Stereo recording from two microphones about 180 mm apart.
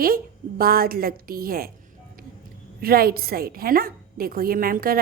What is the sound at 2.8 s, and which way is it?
A woman's voice, 55° right (ahead or behind).